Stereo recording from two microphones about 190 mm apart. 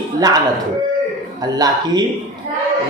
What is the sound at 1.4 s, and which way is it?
Speech, 20° right (ahead or behind).